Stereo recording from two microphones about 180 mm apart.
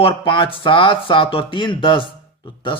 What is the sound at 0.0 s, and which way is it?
Speech, 30° left (ahead or behind).